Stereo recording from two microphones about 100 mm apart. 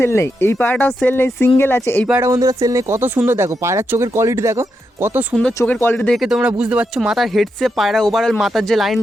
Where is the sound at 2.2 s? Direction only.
35° right (ahead or behind).